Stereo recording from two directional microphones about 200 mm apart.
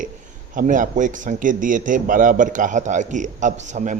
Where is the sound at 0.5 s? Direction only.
40° right (ahead or behind).